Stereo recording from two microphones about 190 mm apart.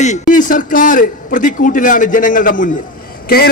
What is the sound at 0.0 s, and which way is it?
A man's voice, 40° left (ahead or behind).